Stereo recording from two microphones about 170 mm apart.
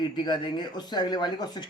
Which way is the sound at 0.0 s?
25° left (ahead or behind).